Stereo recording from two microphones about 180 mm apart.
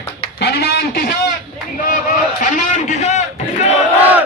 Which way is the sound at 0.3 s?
65° left (ahead or behind).